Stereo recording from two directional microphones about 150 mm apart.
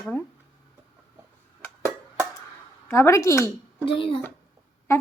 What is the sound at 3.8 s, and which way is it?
Child singing, 35° left (ahead or behind).